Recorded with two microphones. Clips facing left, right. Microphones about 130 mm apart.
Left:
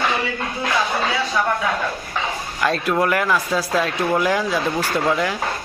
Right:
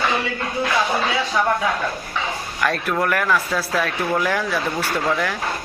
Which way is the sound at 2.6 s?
20° left (ahead or behind).